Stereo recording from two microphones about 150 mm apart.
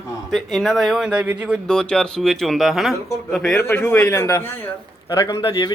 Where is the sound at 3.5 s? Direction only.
15° left (ahead or behind).